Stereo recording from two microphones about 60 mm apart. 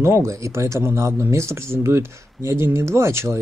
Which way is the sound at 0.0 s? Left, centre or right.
Right.